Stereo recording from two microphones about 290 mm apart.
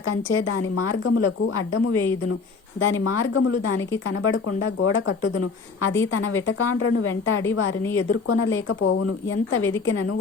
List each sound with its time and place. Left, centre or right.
0.0 s a woman's voice: left